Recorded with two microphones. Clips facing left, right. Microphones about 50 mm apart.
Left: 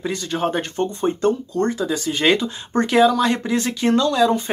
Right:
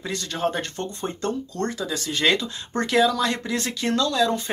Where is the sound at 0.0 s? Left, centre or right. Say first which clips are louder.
Left 4 dB; centre.